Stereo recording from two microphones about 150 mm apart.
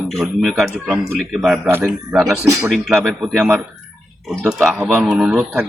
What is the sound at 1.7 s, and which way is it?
Speech, 15° right (ahead or behind).